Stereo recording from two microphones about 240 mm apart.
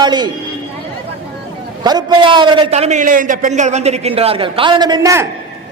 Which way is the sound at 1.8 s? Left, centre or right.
Centre.